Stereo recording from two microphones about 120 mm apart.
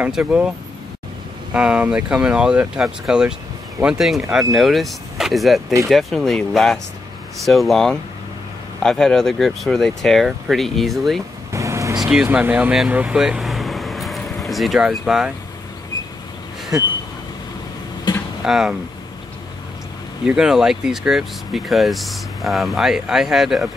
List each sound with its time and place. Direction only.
0.0 s speech: 10° right (ahead or behind)
1.5 s speech: 10° right (ahead or behind)
11.5 s vehicle: 25° right (ahead or behind)
12.0 s speech: 10° right (ahead or behind)
16.7 s speech: 5° right (ahead or behind)
18.1 s a sound: 35° left (ahead or behind)
18.4 s speech: 5° right (ahead or behind)
20.2 s speech: 5° right (ahead or behind)